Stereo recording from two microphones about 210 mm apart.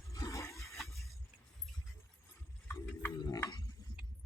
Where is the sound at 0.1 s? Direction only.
15° left (ahead or behind).